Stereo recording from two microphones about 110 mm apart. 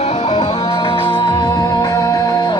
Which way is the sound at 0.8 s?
50° left (ahead or behind).